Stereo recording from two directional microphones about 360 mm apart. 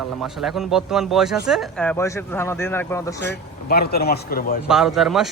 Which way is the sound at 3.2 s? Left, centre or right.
Left.